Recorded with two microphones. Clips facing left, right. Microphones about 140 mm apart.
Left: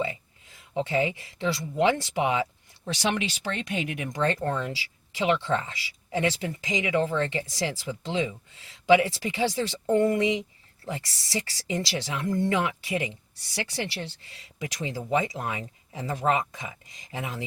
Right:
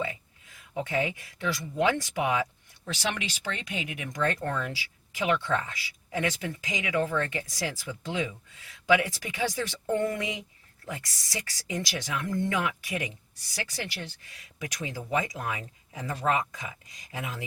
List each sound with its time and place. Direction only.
0.0 s speech: 25° left (ahead or behind)